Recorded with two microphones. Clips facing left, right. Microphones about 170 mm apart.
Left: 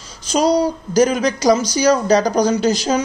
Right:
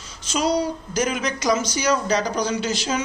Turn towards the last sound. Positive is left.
turn(degrees=40)  # may be behind; listen again after turning